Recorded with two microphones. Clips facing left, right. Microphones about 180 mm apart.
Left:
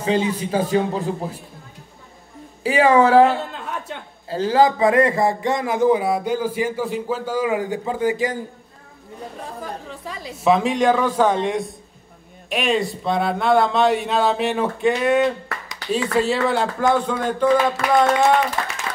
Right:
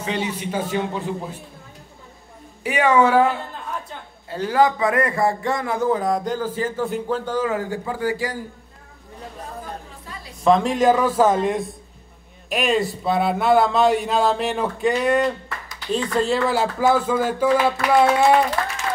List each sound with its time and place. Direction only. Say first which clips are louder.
0.0 s a man's voice: left 5 dB; 35° left (ahead or behind)
2.6 s a man's voice: left 2 dB; 30° left (ahead or behind)
4.3 s a man's voice: left 2 dB; 30° left (ahead or behind)
9.6 s chatter: left 3 dB; 90° left
10.4 s a man's voice: right 1 dB; 5° left (ahead or behind)